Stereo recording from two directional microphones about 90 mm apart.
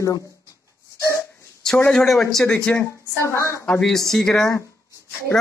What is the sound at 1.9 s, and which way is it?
Speech, centre (ahead or behind).